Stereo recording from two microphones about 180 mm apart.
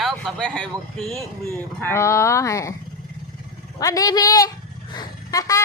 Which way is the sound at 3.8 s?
20° left (ahead or behind).